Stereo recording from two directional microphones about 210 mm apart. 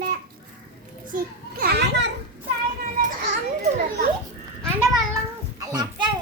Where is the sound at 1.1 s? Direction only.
45° right (ahead or behind).